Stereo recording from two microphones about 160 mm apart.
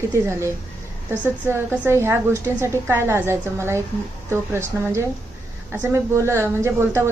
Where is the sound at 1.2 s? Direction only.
10° right (ahead or behind).